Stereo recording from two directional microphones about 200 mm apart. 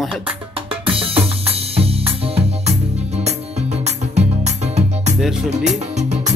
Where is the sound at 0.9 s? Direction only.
25° right (ahead or behind).